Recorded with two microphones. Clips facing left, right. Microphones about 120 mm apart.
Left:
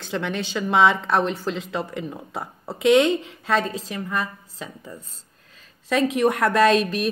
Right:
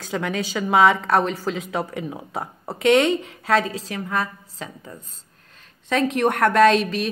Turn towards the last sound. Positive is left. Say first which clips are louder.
# right 1 dB
turn(degrees=0)  # may be behind; listen again after turning